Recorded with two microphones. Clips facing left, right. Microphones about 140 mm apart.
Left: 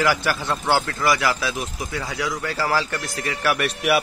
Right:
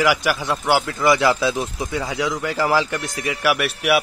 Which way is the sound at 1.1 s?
25° right (ahead or behind).